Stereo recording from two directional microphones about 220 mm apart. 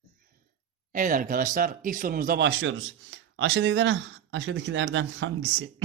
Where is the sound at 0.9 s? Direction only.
35° right (ahead or behind).